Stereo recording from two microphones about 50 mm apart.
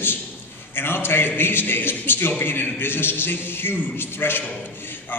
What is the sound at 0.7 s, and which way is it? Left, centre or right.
A man's voice, left.